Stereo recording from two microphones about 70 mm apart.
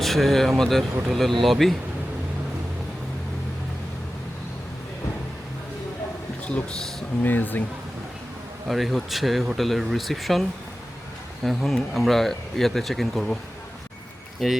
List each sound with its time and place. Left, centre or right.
0.0 s speech: centre
7.2 s speech: left
8.6 s speech: centre
11.4 s speech: centre
14.4 s speech: centre